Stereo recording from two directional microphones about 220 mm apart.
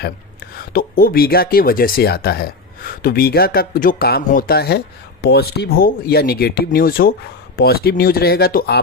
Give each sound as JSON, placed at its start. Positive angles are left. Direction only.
{"t": 0.5, "sound": "speech", "side_deg": 40}